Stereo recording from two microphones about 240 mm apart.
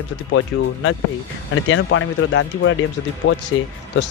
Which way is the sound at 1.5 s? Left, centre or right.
Left.